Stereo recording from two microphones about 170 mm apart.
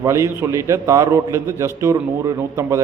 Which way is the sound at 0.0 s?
15° right (ahead or behind).